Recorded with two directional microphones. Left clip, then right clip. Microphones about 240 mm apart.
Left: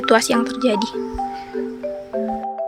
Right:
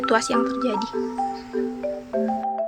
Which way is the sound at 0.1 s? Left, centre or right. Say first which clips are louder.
Left 6 dB; left.